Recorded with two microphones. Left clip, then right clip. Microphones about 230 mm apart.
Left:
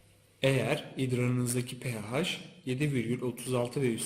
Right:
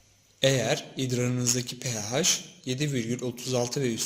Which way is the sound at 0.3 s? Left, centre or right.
Right.